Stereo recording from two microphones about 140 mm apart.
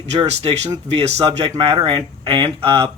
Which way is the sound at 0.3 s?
50° right (ahead or behind).